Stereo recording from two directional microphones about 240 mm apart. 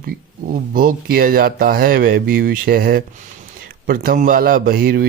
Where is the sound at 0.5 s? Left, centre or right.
Right.